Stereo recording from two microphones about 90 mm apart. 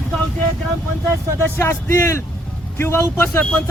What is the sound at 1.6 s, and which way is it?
A man's voice, 30° left (ahead or behind).